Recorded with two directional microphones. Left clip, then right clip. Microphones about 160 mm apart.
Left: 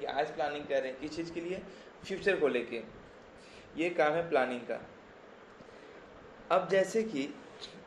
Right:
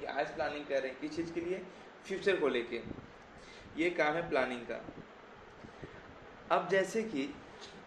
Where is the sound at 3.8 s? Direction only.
20° left (ahead or behind).